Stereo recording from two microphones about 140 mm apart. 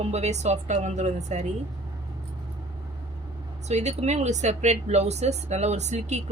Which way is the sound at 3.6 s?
55° right (ahead or behind).